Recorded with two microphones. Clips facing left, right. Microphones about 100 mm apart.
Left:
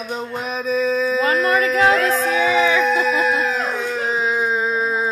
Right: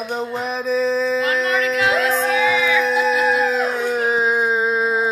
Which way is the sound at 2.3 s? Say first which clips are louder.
Left 2 dB; 35° left (ahead or behind).